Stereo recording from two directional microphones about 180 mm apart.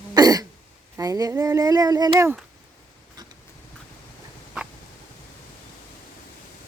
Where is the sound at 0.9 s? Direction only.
20° right (ahead or behind).